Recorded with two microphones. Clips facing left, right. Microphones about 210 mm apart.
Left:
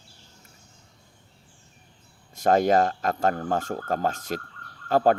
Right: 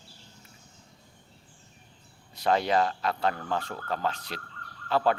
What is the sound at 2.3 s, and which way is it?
Speech, 45° left (ahead or behind).